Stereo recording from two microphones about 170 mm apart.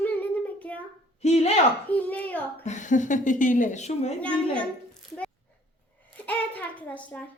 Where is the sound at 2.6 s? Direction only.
45° left (ahead or behind).